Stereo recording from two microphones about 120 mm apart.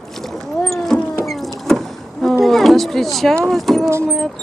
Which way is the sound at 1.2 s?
Centre (ahead or behind).